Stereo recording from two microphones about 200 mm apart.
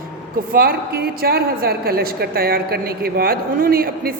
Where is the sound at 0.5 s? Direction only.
50° right (ahead or behind).